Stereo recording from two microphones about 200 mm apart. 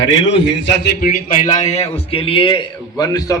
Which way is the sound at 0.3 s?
65° left (ahead or behind).